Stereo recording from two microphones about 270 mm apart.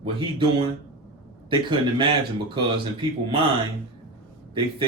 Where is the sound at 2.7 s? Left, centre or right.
Centre.